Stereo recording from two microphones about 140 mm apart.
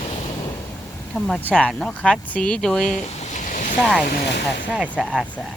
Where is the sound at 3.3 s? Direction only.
65° left (ahead or behind).